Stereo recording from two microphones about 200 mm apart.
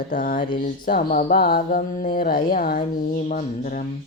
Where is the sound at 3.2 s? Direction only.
40° left (ahead or behind).